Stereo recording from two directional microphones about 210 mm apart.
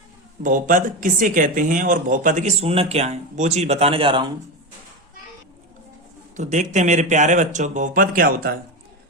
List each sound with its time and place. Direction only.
0.4 s speech: 40° right (ahead or behind)
6.3 s speech: 35° right (ahead or behind)